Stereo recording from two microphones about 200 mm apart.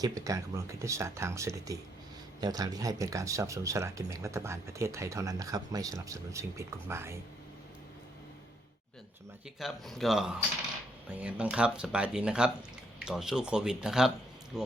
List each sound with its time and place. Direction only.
0.0 s speech: 15° right (ahead or behind)
9.6 s speech: centre (ahead or behind)